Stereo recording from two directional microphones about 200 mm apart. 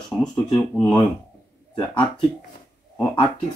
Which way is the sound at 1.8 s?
25° left (ahead or behind).